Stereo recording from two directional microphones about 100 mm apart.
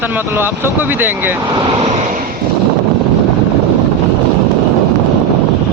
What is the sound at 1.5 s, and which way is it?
Speech, 50° right (ahead or behind).